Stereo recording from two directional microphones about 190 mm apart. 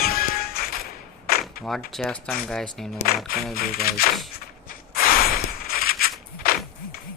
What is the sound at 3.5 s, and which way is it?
Speech, 50° left (ahead or behind).